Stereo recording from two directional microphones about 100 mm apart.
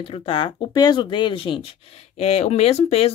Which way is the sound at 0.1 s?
65° left (ahead or behind).